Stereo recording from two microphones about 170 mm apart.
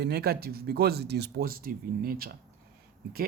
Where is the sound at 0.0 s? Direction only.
70° right (ahead or behind).